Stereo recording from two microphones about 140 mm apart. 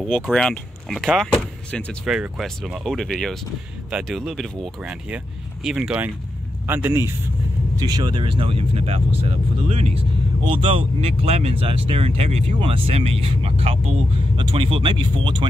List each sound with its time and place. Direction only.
0.0 s speech: 5° left (ahead or behind)
2.0 s speech: centre (ahead or behind); by 7.1 s 15° right (ahead or behind)
7.8 s speech: 30° right (ahead or behind)